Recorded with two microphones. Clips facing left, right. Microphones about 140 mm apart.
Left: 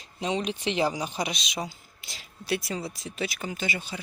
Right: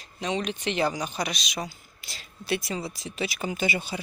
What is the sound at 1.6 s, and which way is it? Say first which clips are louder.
Speech: even; 10° left (ahead or behind).